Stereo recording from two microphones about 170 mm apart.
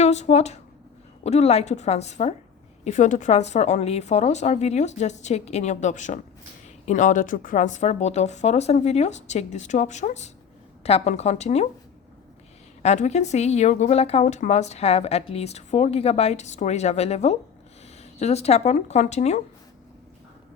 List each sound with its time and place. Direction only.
0.0 s a woman's voice: 40° left (ahead or behind)
12.8 s speech: 40° left (ahead or behind)